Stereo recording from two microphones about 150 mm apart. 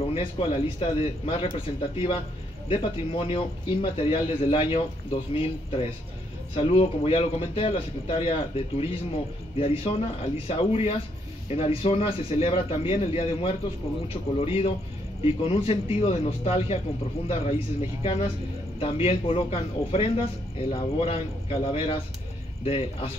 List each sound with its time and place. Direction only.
0.1 s speech: 40° left (ahead or behind)